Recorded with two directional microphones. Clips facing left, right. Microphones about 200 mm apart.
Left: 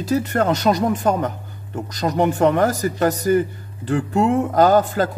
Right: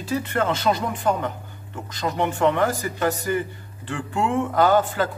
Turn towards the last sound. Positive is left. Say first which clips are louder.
# left 4 dB
turn(degrees=40)  # may be behind; listen again after turning